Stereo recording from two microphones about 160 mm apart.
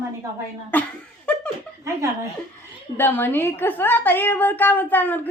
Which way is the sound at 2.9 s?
15° left (ahead or behind).